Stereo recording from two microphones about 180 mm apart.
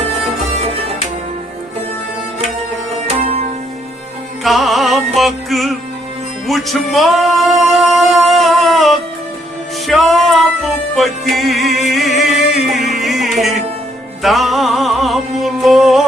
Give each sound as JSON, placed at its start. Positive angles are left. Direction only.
{"t": 3.1, "sound": "music", "side_deg": -35}
{"t": 4.4, "sound": "music", "side_deg": 0}